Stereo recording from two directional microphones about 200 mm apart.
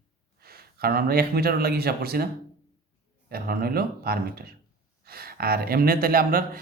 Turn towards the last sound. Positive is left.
turn(degrees=-45)  # may be behind; listen again after turning